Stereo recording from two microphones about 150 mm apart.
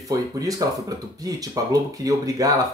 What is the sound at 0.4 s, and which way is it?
Speech, 25° right (ahead or behind).